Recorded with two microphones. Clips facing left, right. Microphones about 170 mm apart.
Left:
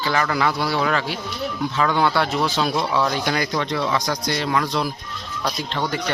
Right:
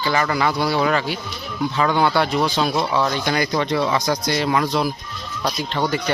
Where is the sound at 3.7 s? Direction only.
10° right (ahead or behind).